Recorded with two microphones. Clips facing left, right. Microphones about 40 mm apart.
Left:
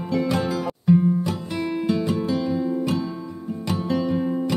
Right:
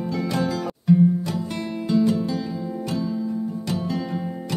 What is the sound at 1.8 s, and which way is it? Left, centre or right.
Music, left.